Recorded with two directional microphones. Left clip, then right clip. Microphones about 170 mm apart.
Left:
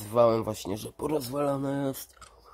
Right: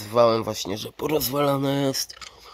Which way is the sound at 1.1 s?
20° right (ahead or behind).